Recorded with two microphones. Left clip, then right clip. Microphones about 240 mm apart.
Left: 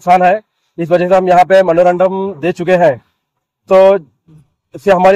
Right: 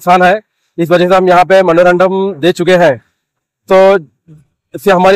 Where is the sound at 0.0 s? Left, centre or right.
Right.